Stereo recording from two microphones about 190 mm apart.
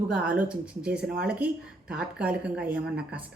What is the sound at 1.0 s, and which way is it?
Speech, 55° right (ahead or behind).